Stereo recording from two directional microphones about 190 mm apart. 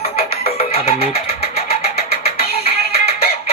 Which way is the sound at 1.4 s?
30° left (ahead or behind).